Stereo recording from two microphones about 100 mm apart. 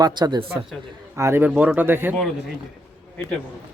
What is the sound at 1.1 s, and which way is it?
Speech, 25° right (ahead or behind).